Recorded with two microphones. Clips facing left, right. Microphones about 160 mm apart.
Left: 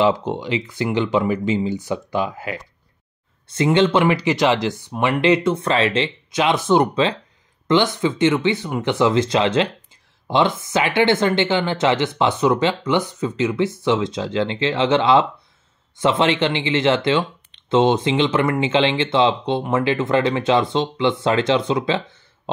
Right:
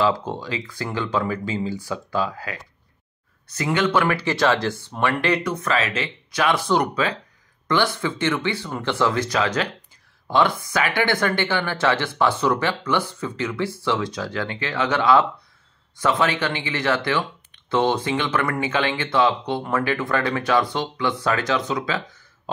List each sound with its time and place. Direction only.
0.0 s speech: 20° left (ahead or behind)